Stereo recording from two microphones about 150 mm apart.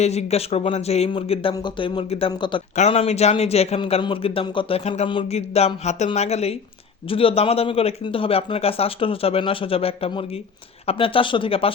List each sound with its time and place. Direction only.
0.0 s a man's voice: 45° left (ahead or behind); by 2.6 s 30° left (ahead or behind)
2.7 s a man's voice: 45° left (ahead or behind)